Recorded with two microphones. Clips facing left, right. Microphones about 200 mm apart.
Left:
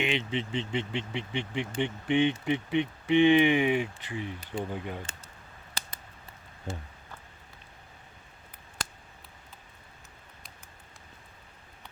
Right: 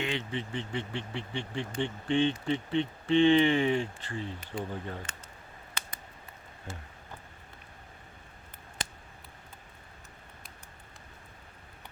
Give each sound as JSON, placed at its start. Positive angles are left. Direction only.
{"t": 0.0, "sound": "speech", "side_deg": 20}